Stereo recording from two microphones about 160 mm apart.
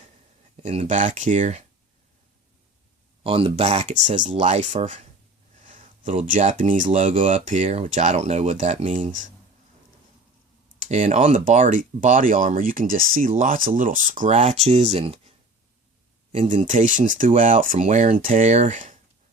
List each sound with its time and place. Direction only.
0.6 s speech: 45° right (ahead or behind)
3.2 s speech: 35° right (ahead or behind); by 6.8 s 50° right (ahead or behind)
7.1 s speech: 35° right (ahead or behind)
10.8 s speech: 45° right (ahead or behind)
14.3 s speech: 40° right (ahead or behind)
16.6 s speech: 50° right (ahead or behind)